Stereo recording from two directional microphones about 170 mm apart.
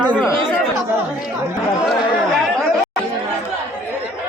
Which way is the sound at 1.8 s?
Centre (ahead or behind).